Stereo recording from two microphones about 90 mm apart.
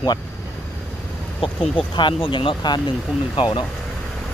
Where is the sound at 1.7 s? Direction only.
65° left (ahead or behind).